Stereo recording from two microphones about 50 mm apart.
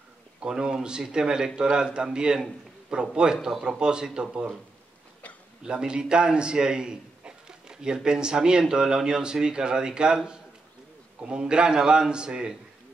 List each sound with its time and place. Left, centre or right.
0.4 s a man's voice: centre
5.7 s a man's voice: centre